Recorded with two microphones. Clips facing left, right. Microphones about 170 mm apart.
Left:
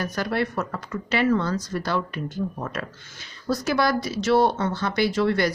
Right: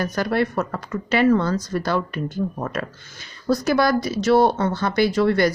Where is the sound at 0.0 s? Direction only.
45° right (ahead or behind).